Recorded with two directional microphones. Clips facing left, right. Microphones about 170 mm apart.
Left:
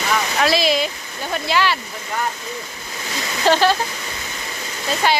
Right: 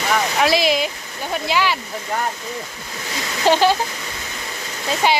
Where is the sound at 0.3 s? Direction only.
15° right (ahead or behind).